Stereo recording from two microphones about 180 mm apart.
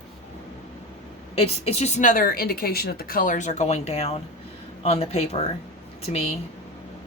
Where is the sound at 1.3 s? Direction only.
35° left (ahead or behind).